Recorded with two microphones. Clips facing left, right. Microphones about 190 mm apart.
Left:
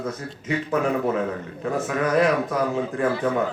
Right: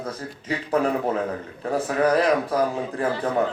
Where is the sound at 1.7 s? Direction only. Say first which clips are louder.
Right 2 dB; 35° right (ahead or behind).